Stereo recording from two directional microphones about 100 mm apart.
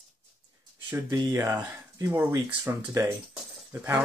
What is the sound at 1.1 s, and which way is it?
Speech, 35° right (ahead or behind).